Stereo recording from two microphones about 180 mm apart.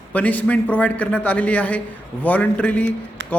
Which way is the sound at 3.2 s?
85° right.